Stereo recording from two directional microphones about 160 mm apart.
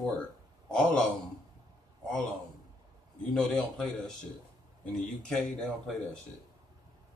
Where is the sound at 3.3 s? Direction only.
Centre (ahead or behind).